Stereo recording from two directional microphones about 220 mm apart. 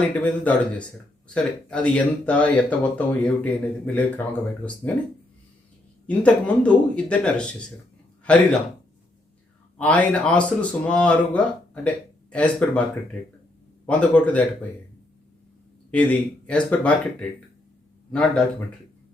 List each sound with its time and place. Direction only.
0.2 s speech: 5° left (ahead or behind)
6.1 s a man's voice: 5° left (ahead or behind)
9.7 s speech: 5° left (ahead or behind)
13.8 s speech: 5° left (ahead or behind)
15.9 s speech: 5° left (ahead or behind)